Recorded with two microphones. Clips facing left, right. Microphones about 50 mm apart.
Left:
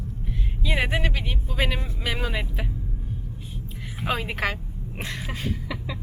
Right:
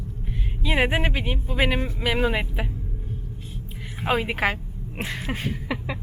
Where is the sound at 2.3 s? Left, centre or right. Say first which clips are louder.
Right 5 dB; centre.